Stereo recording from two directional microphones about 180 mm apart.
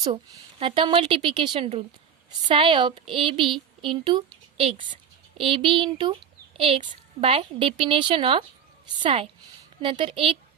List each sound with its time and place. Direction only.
0.6 s a child's voice: 30° right (ahead or behind)